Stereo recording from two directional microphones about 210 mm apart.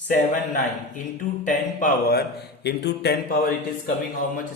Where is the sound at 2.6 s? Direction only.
55° left (ahead or behind).